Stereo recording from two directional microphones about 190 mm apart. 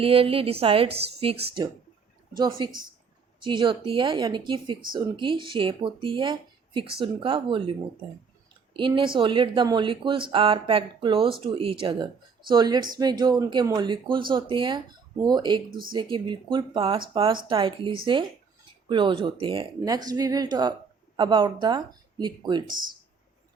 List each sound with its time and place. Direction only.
0.0 s speech: 30° right (ahead or behind)
8.7 s speech: 25° right (ahead or behind)